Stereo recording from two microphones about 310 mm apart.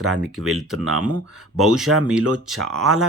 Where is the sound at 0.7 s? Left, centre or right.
Right.